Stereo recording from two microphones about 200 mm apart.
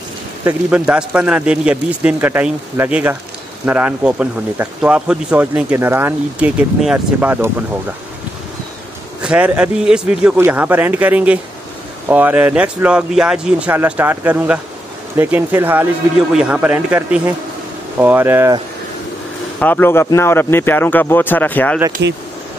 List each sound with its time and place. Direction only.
0.5 s speech: 5° right (ahead or behind)
9.2 s speech: 5° right (ahead or behind)
19.6 s speech: 10° left (ahead or behind)
22.0 s speech: 60° right (ahead or behind)